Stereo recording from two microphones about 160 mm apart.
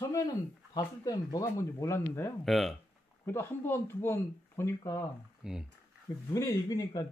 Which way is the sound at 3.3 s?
15° left (ahead or behind).